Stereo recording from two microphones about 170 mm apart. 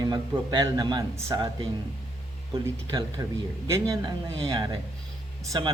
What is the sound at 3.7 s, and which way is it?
A man's voice, 20° right (ahead or behind).